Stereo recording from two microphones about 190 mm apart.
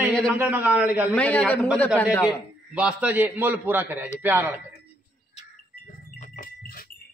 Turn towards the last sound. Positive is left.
turn(degrees=50)  # may be behind; listen again after turning